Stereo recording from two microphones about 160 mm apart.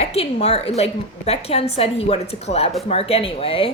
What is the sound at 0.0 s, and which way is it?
A woman's voice, 40° left (ahead or behind).